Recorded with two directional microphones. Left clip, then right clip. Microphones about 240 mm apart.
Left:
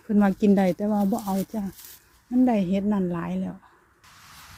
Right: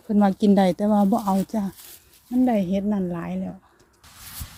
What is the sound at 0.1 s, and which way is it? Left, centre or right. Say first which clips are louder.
Speech: right 2 dB; centre.